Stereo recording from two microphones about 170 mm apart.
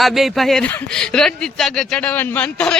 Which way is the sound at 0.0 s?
Centre (ahead or behind).